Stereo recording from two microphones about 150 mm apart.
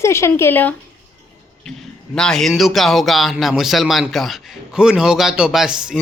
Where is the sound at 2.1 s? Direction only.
5° left (ahead or behind).